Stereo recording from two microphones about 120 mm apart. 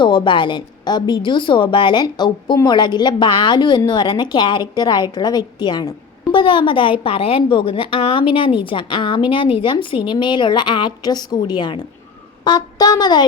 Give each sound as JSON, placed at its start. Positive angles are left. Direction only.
{"t": 0.0, "sound": "a woman's voice", "side_deg": 40}